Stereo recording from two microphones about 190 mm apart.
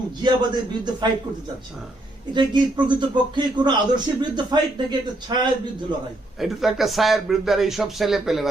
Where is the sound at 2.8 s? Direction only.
25° right (ahead or behind).